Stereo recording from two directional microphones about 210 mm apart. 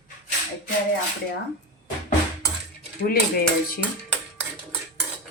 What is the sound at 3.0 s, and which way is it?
Speech, 45° left (ahead or behind).